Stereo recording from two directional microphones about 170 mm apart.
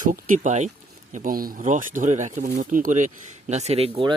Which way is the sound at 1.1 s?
55° right (ahead or behind).